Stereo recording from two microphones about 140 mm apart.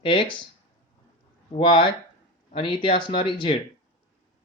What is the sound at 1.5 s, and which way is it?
Speech, 40° left (ahead or behind).